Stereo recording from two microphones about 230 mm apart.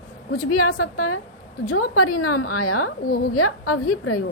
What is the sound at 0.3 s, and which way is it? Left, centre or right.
A woman's voice, left.